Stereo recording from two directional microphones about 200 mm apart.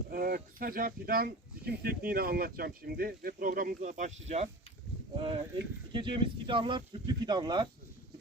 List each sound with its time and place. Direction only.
0.1 s speech: 45° right (ahead or behind); by 7.7 s 20° right (ahead or behind)